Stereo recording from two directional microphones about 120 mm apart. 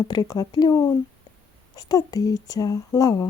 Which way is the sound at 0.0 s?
35° left (ahead or behind).